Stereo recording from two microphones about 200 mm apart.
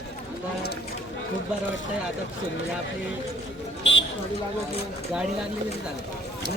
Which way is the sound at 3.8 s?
70° left (ahead or behind).